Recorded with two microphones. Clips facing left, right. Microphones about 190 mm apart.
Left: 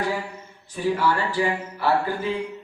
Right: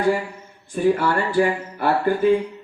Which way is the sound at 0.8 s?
50° right (ahead or behind).